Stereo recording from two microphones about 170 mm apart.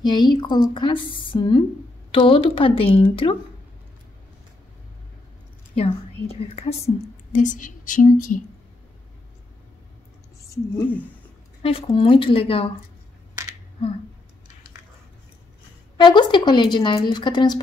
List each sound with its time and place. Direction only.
0.0 s a woman's voice: 25° left (ahead or behind)
5.8 s speech: 35° left (ahead or behind)
7.3 s a woman's voice: 50° left (ahead or behind)
10.5 s speech: 10° left (ahead or behind)
11.6 s speech: 30° left (ahead or behind)
16.0 s a woman's voice: 25° left (ahead or behind)